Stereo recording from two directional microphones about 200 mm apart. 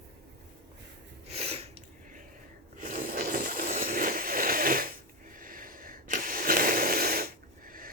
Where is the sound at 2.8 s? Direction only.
40° right (ahead or behind).